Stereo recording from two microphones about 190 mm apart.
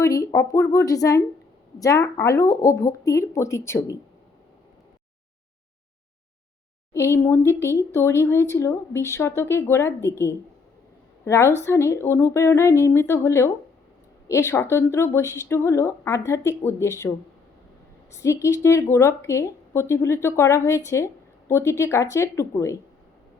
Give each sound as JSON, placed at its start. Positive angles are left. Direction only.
{"t": 0.0, "sound": "speech", "side_deg": 15}
{"t": 6.9, "sound": "speech", "side_deg": 15}
{"t": 18.1, "sound": "speech", "side_deg": 15}